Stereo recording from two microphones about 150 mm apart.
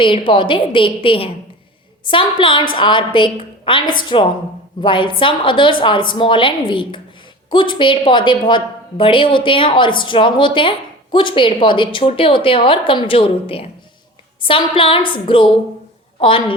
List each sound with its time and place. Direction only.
0.0 s a woman's voice: 35° left (ahead or behind)